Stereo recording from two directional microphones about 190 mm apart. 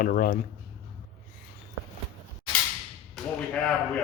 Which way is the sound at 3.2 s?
Centre (ahead or behind).